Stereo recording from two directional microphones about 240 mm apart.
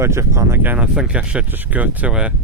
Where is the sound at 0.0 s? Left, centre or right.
Centre.